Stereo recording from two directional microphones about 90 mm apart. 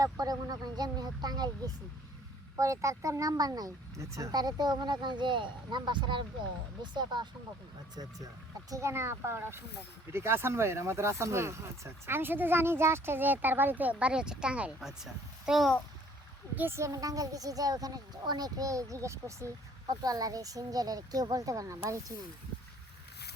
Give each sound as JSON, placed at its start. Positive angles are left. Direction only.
{"t": 0.0, "sound": "speech", "side_deg": -45}
{"t": 2.6, "sound": "speech", "side_deg": -35}
{"t": 8.7, "sound": "speech", "side_deg": -30}
{"t": 16.6, "sound": "a woman's voice", "side_deg": -30}
{"t": 19.9, "sound": "a woman's voice", "side_deg": -45}